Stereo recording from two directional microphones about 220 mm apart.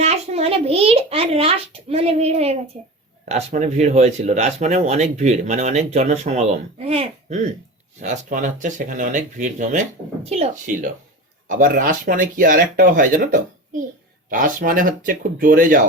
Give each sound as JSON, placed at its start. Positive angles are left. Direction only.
{"t": 0.0, "sound": "a child's voice", "side_deg": -30}